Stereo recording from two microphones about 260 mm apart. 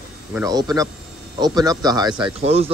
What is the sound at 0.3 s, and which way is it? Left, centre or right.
Speech, centre.